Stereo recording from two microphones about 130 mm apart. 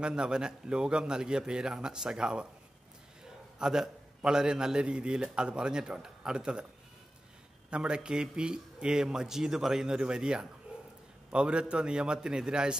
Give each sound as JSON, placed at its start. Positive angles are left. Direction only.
{"t": 0.0, "sound": "a man's voice", "side_deg": -5}
{"t": 3.5, "sound": "a man's voice", "side_deg": -5}
{"t": 7.7, "sound": "a man's voice", "side_deg": -5}